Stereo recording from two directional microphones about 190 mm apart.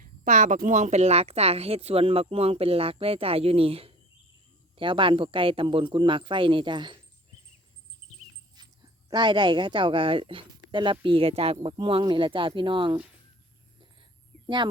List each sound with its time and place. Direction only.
0.3 s speech: 40° right (ahead or behind); by 7.0 s 25° right (ahead or behind)
8.5 s speech: 20° right (ahead or behind)
14.0 s a sound: 25° right (ahead or behind)